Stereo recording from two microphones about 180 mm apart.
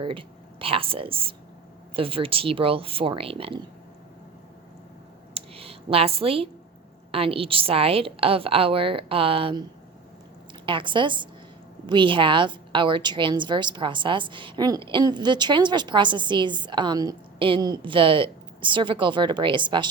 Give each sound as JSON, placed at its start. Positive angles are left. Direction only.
{"t": 0.0, "sound": "a woman's voice", "side_deg": -30}
{"t": 5.3, "sound": "a sound", "side_deg": -30}
{"t": 7.1, "sound": "a woman's voice", "side_deg": -30}
{"t": 10.7, "sound": "a woman's voice", "side_deg": -25}